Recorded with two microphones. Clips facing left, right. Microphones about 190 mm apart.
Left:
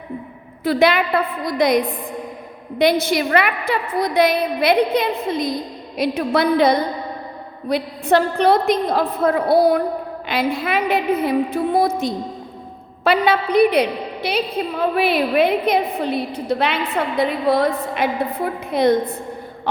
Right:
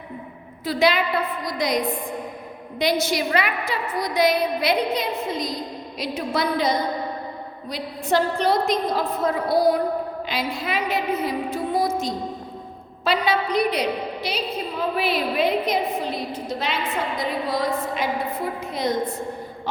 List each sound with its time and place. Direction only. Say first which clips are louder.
0.6 s a woman's voice: left 4 dB; 55° left (ahead or behind)